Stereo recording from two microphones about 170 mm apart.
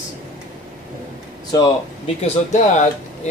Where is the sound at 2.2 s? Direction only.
40° left (ahead or behind).